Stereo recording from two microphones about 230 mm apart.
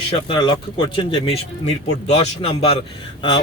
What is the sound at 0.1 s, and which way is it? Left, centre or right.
Speech, left.